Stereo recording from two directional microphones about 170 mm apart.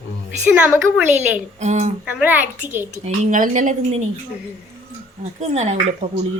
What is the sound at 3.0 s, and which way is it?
Speech, 50° right (ahead or behind).